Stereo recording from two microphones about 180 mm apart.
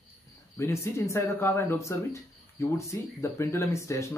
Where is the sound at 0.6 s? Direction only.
15° left (ahead or behind).